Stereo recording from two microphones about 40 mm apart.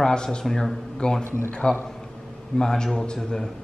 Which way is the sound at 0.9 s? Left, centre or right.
Left.